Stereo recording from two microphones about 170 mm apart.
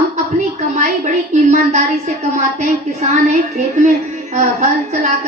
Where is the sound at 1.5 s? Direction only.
45° right (ahead or behind).